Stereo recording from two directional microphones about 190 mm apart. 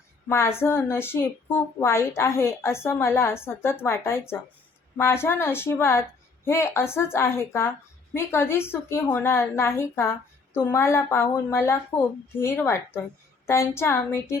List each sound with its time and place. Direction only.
0.3 s a woman's voice: 15° left (ahead or behind)